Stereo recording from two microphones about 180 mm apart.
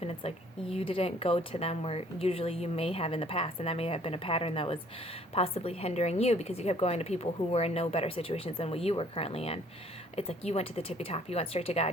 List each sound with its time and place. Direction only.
0.0 s speech: 35° left (ahead or behind)